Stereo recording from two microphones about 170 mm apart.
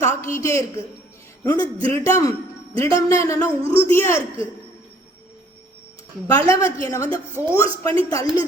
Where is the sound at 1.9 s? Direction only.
15° left (ahead or behind).